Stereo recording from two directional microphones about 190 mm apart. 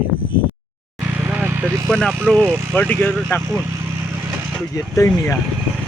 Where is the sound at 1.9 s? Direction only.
5° left (ahead or behind).